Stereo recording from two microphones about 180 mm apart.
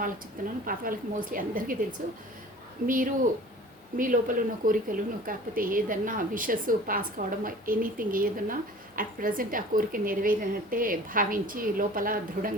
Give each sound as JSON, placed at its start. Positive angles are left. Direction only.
{"t": 0.6, "sound": "a woman's voice", "side_deg": -50}
{"t": 2.8, "sound": "a woman's voice", "side_deg": -50}